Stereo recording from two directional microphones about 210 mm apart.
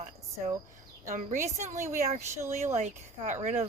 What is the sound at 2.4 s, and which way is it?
Speech, 15° right (ahead or behind).